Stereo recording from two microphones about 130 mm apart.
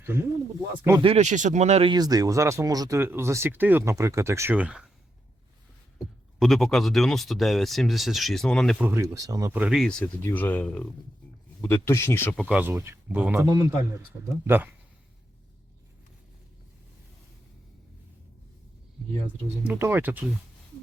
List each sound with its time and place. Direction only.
0.0 s speech: 20° right (ahead or behind)
1.0 s speech: 60° right (ahead or behind)
1.9 s speech: 30° right (ahead or behind); by 4.9 s 10° right (ahead or behind)
6.4 s speech: centre (ahead or behind)
8.8 s speech: 20° right (ahead or behind)
9.5 s speech: 15° right (ahead or behind)
9.7 s speech: 5° left (ahead or behind)
10.0 s speech: 15° left (ahead or behind)
12.8 s speech: 15° right (ahead or behind)
19.6 s speech: 15° right (ahead or behind)